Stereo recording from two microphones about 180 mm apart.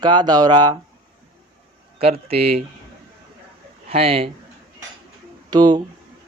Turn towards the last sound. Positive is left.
turn(degrees=-20)  # may be behind; listen again after turning